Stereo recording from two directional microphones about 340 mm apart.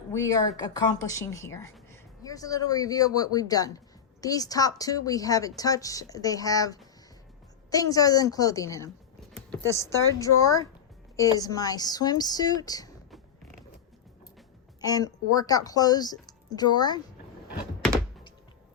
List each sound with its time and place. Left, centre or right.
0.1 s speech: centre
10.2 s speech: centre
14.8 s speech: centre